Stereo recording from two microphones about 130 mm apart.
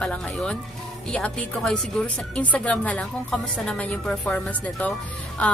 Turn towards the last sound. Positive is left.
turn(degrees=10)  # may be behind; listen again after turning